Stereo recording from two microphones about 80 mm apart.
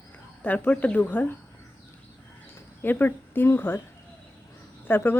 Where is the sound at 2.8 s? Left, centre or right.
Left.